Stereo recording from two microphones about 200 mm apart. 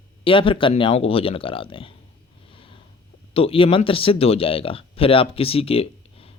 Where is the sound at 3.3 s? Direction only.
30° left (ahead or behind).